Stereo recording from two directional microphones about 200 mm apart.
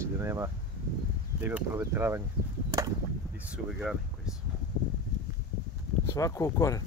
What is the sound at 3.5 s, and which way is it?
Speech, 5° right (ahead or behind).